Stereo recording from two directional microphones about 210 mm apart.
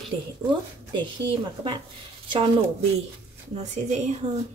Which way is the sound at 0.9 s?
25° right (ahead or behind).